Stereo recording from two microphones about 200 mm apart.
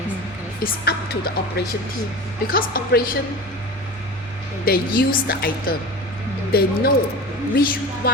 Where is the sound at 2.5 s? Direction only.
45° left (ahead or behind).